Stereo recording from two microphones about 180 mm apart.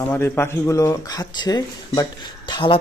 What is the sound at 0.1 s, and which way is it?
Speech, 15° left (ahead or behind).